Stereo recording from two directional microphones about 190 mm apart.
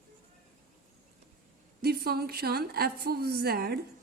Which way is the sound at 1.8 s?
55° right (ahead or behind).